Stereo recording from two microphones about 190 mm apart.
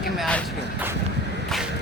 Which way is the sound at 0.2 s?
5° left (ahead or behind).